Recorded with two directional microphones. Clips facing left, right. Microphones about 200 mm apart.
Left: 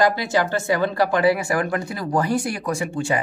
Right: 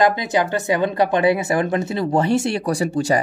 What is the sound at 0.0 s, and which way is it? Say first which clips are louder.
Speech: right 2 dB; 20° right (ahead or behind).